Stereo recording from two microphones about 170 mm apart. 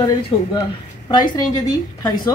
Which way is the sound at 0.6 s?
25° left (ahead or behind).